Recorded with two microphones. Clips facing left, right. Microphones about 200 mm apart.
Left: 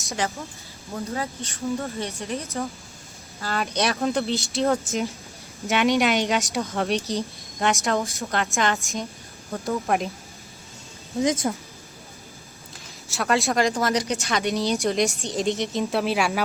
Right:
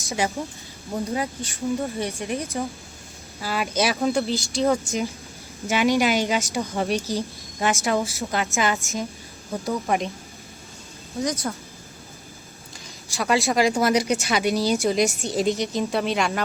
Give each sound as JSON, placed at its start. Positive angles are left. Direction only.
{"t": 0.0, "sound": "speech", "side_deg": 0}
{"t": 0.9, "sound": "a woman's voice", "side_deg": -15}
{"t": 11.4, "sound": "speech", "side_deg": 15}
{"t": 13.1, "sound": "a woman's voice", "side_deg": 0}